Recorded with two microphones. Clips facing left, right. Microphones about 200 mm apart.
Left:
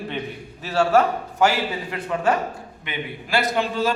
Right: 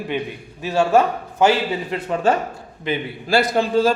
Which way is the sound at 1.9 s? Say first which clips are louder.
Right 2 dB; 25° right (ahead or behind).